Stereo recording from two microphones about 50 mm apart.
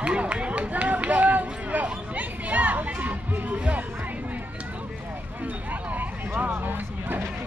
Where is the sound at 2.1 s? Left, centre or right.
Right.